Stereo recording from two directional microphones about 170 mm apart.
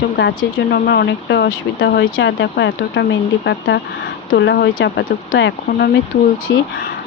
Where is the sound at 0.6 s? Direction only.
70° left (ahead or behind); by 6.6 s 90° left.